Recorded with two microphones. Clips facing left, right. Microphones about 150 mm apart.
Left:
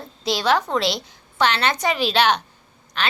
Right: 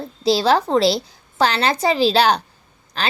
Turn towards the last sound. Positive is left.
turn(degrees=-35)  # may be behind; listen again after turning